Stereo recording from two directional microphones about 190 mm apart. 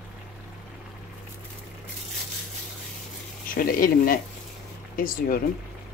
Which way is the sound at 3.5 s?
50° left (ahead or behind).